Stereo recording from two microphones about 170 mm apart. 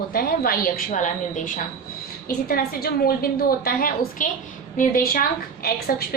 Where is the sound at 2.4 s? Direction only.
60° left (ahead or behind).